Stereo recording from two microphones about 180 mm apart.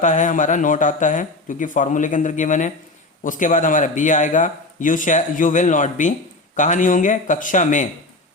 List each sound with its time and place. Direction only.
0.0 s a man's voice: 45° left (ahead or behind)